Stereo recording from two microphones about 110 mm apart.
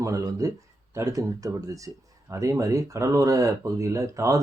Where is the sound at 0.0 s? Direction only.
30° right (ahead or behind).